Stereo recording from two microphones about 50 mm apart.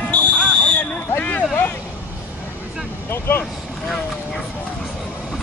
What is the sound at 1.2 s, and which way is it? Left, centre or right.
Vehicle, left.